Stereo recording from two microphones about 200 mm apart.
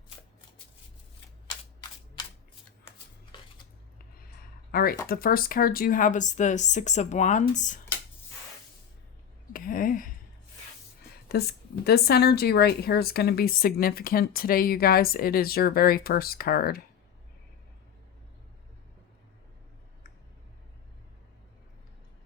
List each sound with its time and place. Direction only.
4.7 s speech: 50° left (ahead or behind)
9.5 s a sound: 45° left (ahead or behind)
11.3 s a woman's voice: 50° left (ahead or behind)